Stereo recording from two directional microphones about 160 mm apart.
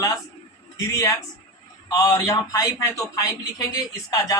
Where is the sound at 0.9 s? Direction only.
20° left (ahead or behind).